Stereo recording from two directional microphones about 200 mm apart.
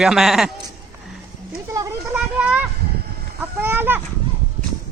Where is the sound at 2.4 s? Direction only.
5° right (ahead or behind).